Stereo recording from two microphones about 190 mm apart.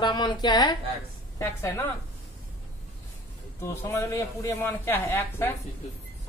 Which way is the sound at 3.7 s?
10° left (ahead or behind).